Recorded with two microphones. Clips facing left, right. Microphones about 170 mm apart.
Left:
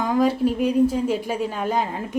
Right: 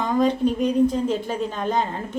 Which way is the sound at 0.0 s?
5° left (ahead or behind).